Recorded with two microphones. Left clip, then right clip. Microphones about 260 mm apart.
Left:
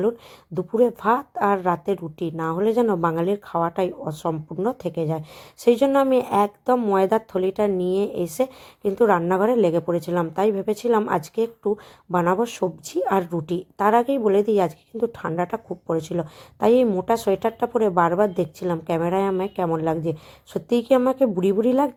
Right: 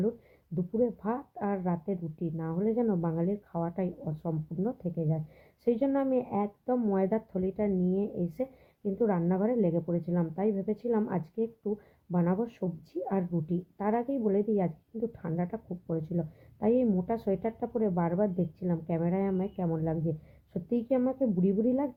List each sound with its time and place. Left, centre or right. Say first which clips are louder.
0.5 s speech: left 10 dB; centre